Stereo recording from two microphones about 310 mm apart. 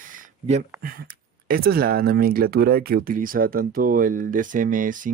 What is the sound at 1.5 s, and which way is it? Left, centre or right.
Speech, right.